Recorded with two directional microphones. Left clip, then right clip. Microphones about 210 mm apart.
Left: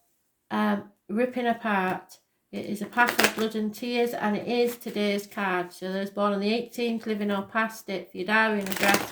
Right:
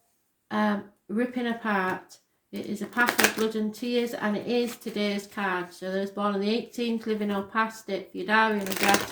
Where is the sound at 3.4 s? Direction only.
35° left (ahead or behind).